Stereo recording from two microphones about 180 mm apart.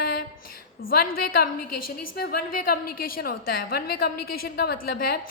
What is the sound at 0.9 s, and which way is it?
A woman's voice, 55° left (ahead or behind).